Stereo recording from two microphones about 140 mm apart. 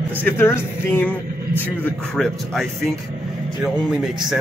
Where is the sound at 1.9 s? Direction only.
5° left (ahead or behind).